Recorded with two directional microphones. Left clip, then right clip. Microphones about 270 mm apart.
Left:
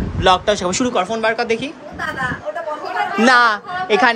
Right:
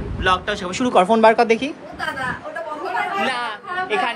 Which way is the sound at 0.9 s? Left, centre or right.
Centre.